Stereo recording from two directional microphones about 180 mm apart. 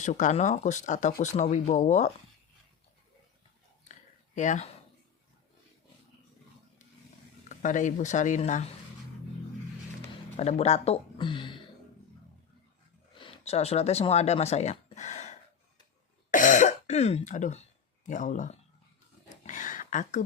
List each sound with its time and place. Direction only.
0.0 s speech: 45° left (ahead or behind)
4.4 s speech: 40° left (ahead or behind)
7.4 s speech: 45° left (ahead or behind)
10.3 s speech: 35° left (ahead or behind)
13.1 s speech: 30° left (ahead or behind)
16.3 s throat clearing: 45° left (ahead or behind)
19.3 s a sound: 45° left (ahead or behind)